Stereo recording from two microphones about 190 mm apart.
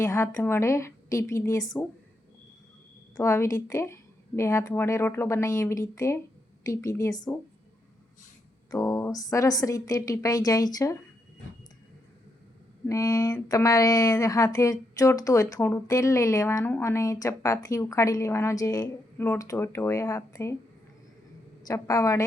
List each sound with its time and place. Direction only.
0.0 s a woman's voice: 15° left (ahead or behind)
3.2 s a woman's voice: 15° left (ahead or behind)
8.7 s a woman's voice: 15° left (ahead or behind)
12.9 s a woman's voice: 20° left (ahead or behind)
21.6 s a woman's voice: 20° left (ahead or behind)